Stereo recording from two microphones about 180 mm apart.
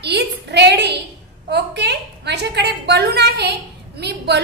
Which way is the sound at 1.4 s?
70° right (ahead or behind).